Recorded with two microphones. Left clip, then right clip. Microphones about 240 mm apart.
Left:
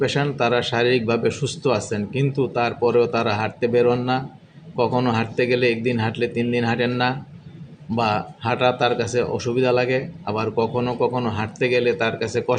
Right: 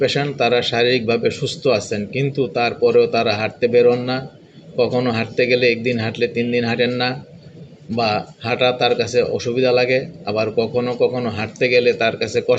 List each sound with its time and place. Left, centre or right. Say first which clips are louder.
0.0 s a man's voice: right 3 dB; centre